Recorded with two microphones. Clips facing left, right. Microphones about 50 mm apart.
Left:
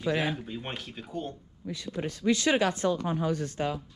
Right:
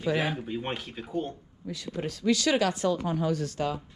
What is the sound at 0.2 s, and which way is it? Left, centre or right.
Speech, centre.